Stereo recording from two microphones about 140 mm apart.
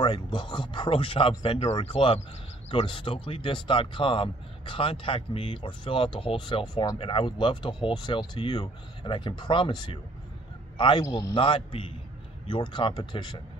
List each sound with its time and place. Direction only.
0.0 s speech: 35° left (ahead or behind)